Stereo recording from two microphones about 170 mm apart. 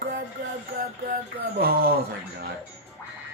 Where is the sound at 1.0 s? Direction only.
60° right (ahead or behind).